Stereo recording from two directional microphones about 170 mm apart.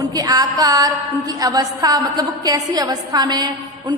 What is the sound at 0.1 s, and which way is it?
A woman's voice, 20° right (ahead or behind).